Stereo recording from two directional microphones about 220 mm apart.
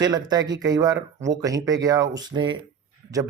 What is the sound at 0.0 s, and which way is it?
Speech, 20° right (ahead or behind).